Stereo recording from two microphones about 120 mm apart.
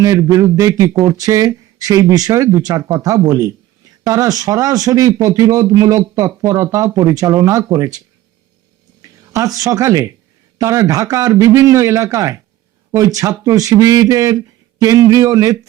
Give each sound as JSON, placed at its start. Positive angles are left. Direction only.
{"t": 0.0, "sound": "speech", "side_deg": -30}